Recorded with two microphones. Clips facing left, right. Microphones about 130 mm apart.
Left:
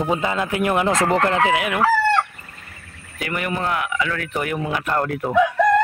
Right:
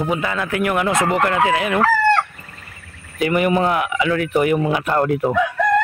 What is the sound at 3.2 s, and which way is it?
Speech, 20° right (ahead or behind).